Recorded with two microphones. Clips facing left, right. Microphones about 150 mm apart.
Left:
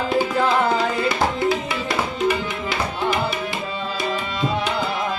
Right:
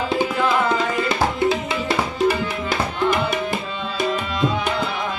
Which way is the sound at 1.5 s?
25° right (ahead or behind).